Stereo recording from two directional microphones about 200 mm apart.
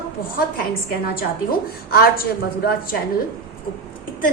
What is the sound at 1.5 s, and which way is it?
Speech, 50° left (ahead or behind).